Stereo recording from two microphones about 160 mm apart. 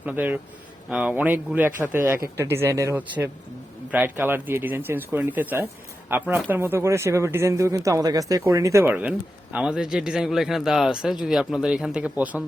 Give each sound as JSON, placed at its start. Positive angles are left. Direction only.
{"t": 0.0, "sound": "speech", "side_deg": -10}